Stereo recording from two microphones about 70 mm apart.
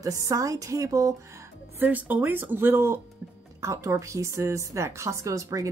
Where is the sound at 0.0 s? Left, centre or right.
Right.